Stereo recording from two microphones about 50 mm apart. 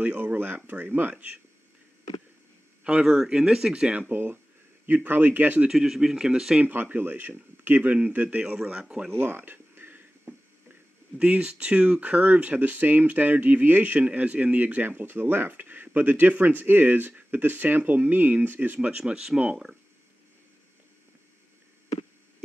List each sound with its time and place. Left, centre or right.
0.0 s speech: right
2.8 s speech: right
4.1 s speech: right
5.7 s speech: centre
6.6 s speech: right
9.2 s a sound: right
11.1 s speech: right
18.8 s speech: right